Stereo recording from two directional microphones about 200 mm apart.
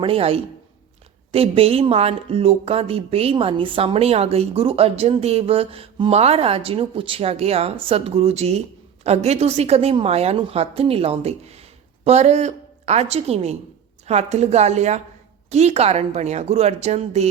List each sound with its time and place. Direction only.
0.0 s a woman's voice: 30° right (ahead or behind)